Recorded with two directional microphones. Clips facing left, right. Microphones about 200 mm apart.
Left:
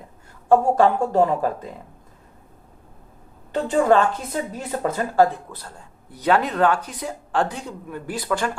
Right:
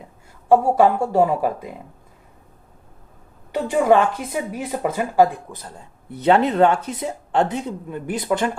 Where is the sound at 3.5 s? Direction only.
10° right (ahead or behind).